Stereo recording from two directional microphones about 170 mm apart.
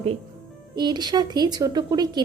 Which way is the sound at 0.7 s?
25° right (ahead or behind).